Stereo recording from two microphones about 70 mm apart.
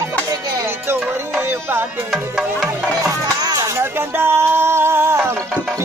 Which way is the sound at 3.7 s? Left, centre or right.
Right.